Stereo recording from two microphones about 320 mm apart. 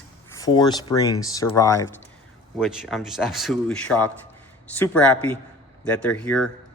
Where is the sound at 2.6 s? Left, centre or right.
Centre.